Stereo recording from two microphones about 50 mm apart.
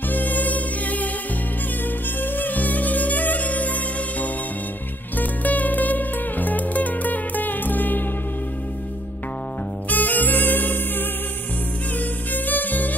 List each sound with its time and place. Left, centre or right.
0.1 s music: left
2.3 s music: left
9.8 s music: left
12.3 s music: left